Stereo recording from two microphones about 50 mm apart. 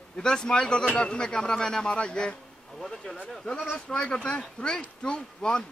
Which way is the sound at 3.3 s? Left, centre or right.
Centre.